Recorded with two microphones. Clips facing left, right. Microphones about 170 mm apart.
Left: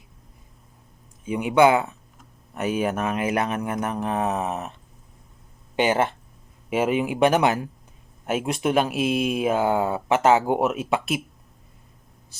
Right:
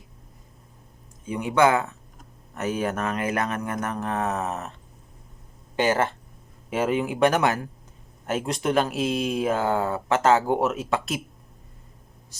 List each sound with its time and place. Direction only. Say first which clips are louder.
1.2 s speech: left 3 dB; 15° left (ahead or behind)
5.7 s speech: left 1 dB; 20° left (ahead or behind)